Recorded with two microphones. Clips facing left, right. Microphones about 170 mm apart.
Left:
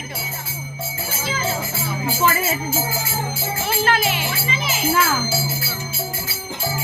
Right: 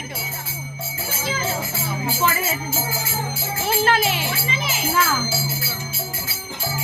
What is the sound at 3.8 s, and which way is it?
Speech, 35° right (ahead or behind).